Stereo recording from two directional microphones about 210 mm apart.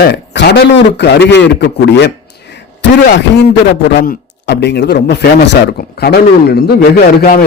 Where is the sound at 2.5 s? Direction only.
55° left (ahead or behind).